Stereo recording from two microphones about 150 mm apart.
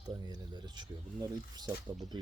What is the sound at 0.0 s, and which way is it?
Speech, 25° right (ahead or behind).